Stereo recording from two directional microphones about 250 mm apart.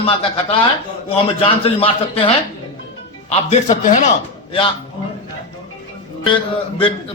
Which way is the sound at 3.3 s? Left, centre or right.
Left.